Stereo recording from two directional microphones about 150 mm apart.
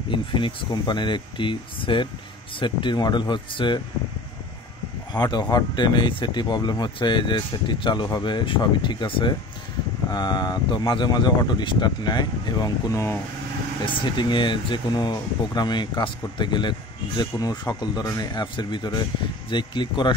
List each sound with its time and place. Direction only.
0.1 s speech: 35° left (ahead or behind)
5.1 s speech: 30° left (ahead or behind)
13.8 s speech: 30° left (ahead or behind)